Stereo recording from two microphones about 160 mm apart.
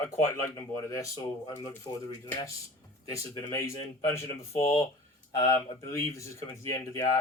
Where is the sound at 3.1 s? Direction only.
20° left (ahead or behind).